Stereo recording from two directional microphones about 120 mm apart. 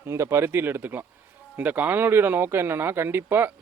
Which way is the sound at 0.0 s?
20° right (ahead or behind).